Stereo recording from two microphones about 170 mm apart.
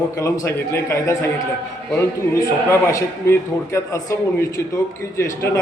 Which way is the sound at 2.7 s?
15° left (ahead or behind).